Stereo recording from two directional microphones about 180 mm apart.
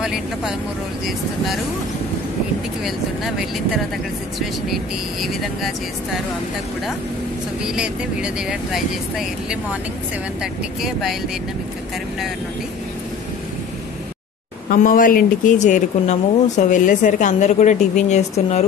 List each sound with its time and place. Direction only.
0.0 s speech: 5° right (ahead or behind)
3.3 s speech: 5° right (ahead or behind)
7.6 s speech: 5° right (ahead or behind)
14.7 s speech: 50° left (ahead or behind)